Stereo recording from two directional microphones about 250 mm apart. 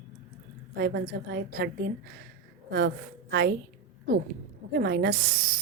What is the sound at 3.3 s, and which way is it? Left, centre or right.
Speech, right.